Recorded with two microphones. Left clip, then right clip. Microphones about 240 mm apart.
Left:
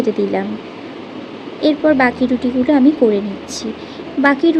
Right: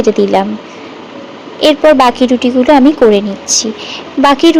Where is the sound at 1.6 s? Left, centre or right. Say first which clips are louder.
Right 7 dB; right.